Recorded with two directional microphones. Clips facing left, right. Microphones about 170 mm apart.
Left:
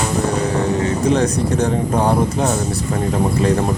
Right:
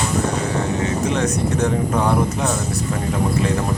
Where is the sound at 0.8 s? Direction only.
35° left (ahead or behind).